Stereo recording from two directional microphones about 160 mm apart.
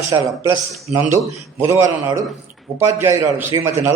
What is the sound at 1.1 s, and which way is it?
A man's voice, 20° right (ahead or behind).